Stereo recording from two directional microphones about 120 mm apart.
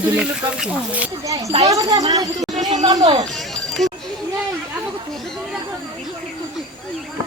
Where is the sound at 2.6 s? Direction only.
80° right.